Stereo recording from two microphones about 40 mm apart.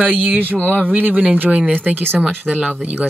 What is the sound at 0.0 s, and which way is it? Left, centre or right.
Speech, right.